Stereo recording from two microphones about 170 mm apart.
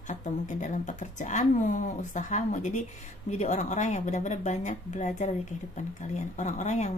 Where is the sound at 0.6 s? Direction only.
45° left (ahead or behind).